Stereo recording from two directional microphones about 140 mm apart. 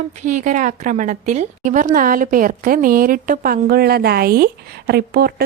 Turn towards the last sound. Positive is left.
turn(degrees=-90)